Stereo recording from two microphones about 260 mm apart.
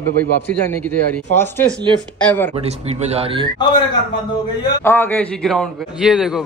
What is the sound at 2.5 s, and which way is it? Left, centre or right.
Speech, right.